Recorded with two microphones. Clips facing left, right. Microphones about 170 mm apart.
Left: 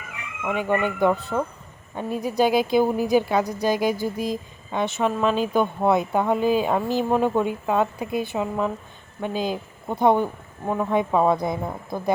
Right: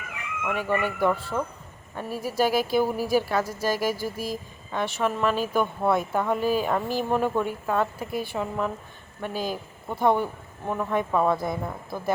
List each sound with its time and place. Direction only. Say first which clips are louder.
0.4 s a woman's voice: left 3 dB; 20° left (ahead or behind)